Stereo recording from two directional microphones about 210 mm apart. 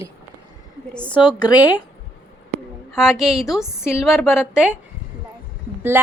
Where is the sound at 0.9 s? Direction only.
5° left (ahead or behind).